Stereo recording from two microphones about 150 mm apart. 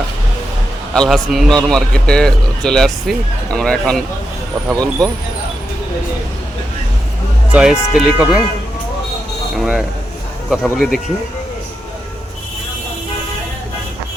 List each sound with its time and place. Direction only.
0.9 s a man's voice: centre (ahead or behind)
4.7 s speech: 25° right (ahead or behind)
7.5 s a man's voice: 5° right (ahead or behind)
9.6 s a man's voice: 5° right (ahead or behind)